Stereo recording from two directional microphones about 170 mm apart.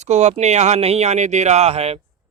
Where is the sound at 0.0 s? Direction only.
40° right (ahead or behind).